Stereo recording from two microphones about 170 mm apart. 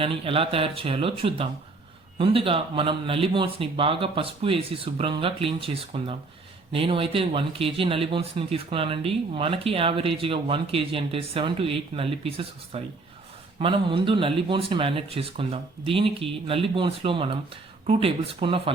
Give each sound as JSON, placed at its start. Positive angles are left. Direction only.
{"t": 0.0, "sound": "speech", "side_deg": -30}